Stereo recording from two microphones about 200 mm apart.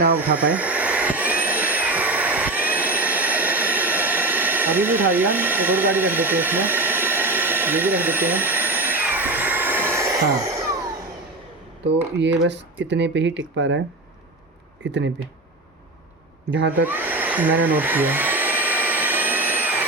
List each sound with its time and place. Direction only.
0.2 s vacuum cleaner: 5° right (ahead or behind)
12.2 s speech: 65° right (ahead or behind)
16.5 s speech: 65° right (ahead or behind)
16.8 s vacuum cleaner: 10° right (ahead or behind)